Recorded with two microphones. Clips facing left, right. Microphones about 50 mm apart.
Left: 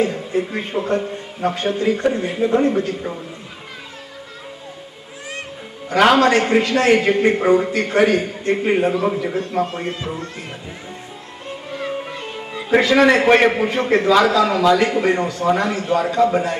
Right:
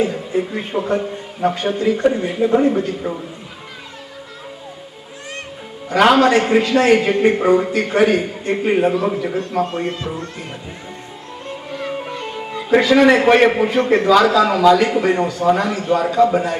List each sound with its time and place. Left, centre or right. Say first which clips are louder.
0.0 s a sound: right 1 dB; centre
0.7 s a man's voice: right 1 dB; centre
6.0 s a man's voice: right 1 dB; centre
11.9 s music: right 1 dB; centre
12.1 s a man's voice: right 3 dB; centre
14.3 s speech: right 2 dB; centre
14.6 s speech: right 2 dB; centre
15.5 s a man's voice: even; centre
15.8 s speech: right 2 dB; centre